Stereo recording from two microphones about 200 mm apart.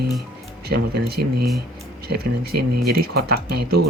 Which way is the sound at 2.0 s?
50° right (ahead or behind).